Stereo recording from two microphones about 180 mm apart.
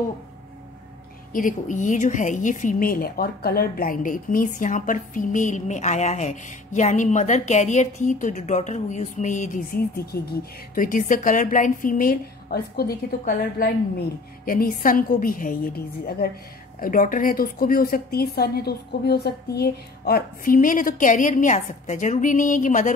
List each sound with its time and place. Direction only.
1.3 s a woman's voice: 45° left (ahead or behind)